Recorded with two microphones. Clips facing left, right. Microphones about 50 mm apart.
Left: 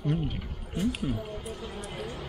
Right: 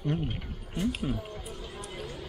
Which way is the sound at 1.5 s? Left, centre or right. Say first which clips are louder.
Left 3 dB; left.